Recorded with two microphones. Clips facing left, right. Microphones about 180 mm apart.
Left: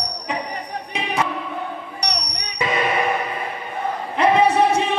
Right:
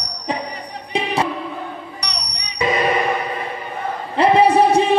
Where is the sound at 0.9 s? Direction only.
30° right (ahead or behind).